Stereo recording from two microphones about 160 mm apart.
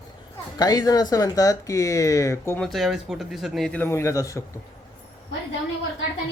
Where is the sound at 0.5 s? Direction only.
25° left (ahead or behind).